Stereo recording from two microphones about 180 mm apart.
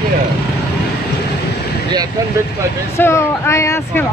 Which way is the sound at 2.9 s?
15° left (ahead or behind).